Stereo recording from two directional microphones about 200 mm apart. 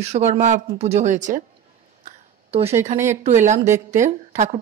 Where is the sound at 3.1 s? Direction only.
35° right (ahead or behind).